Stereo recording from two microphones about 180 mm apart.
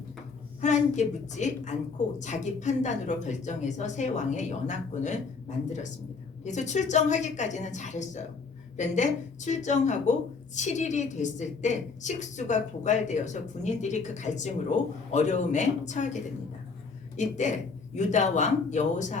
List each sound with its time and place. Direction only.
0.6 s a woman's voice: 40° left (ahead or behind)